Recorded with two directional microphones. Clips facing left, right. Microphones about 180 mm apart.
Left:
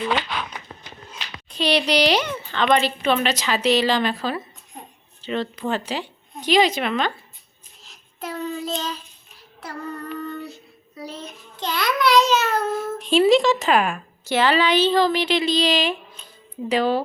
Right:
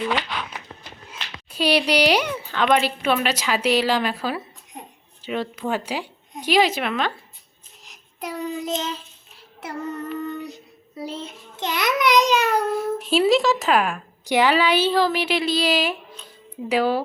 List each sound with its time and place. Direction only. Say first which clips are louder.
1.5 s a woman's voice: right 1 dB; 10° right (ahead or behind)
4.7 s a sound: right 1 dB; 20° right (ahead or behind)
5.2 s a woman's voice: left 1 dB; 10° right (ahead or behind)
8.2 s a woman's voice: even; 15° right (ahead or behind)
9.6 s child singing: right 3 dB; 20° right (ahead or behind)
12.7 s speech: left 1 dB; 5° right (ahead or behind)
14.3 s a woman's voice: right 1 dB; 15° right (ahead or behind)